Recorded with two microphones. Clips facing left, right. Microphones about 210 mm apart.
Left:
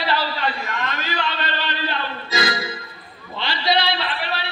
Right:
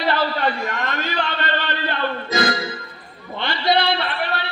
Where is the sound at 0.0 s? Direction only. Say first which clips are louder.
Right 3 dB; 50° right (ahead or behind).